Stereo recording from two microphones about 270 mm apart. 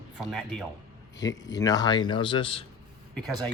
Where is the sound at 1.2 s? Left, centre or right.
Centre.